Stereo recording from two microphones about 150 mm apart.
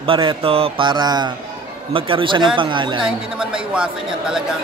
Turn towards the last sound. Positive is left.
turn(degrees=-5)  # may be behind; listen again after turning